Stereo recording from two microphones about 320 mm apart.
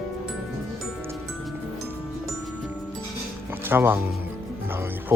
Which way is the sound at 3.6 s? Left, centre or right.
Centre.